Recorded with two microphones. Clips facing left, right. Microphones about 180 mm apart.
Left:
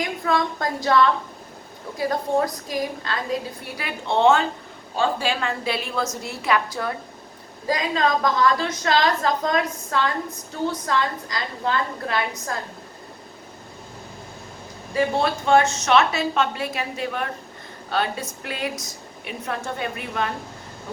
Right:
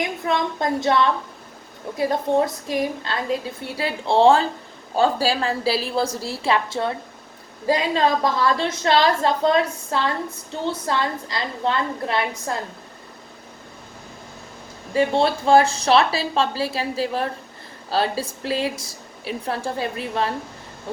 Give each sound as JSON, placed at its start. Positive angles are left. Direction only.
{"t": 0.0, "sound": "a woman's voice", "side_deg": -25}
{"t": 14.9, "sound": "a woman's voice", "side_deg": -30}